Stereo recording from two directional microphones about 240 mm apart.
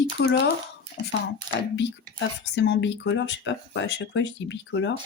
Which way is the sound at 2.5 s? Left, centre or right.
Left.